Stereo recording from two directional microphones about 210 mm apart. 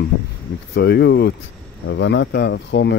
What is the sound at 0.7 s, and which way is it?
Speech, 55° left (ahead or behind).